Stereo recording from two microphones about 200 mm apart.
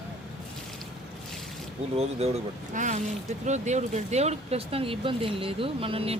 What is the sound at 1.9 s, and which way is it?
Speech, 30° right (ahead or behind).